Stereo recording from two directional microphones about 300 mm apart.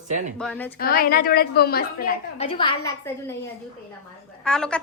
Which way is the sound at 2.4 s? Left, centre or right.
Centre.